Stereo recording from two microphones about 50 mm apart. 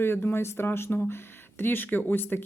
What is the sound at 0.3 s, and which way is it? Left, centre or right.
Speech, left.